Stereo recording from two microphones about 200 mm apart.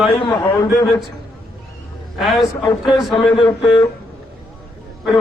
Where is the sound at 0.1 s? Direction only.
25° left (ahead or behind).